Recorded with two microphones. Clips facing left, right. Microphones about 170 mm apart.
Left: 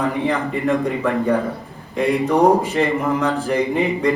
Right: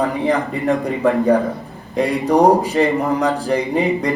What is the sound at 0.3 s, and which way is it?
A man's voice, 35° right (ahead or behind).